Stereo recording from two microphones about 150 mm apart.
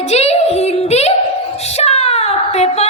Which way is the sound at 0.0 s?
45° left (ahead or behind).